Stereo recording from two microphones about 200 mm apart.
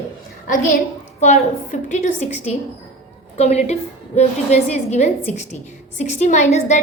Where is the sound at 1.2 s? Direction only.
35° left (ahead or behind).